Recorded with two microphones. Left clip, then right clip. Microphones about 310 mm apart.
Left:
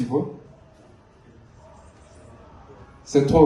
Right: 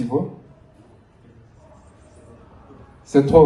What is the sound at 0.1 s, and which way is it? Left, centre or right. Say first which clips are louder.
Speech: right 1 dB; right.